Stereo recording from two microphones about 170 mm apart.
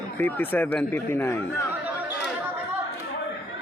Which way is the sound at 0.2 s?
10° left (ahead or behind).